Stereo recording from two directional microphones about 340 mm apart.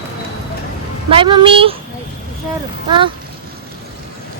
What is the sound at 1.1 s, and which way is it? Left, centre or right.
Speech, centre.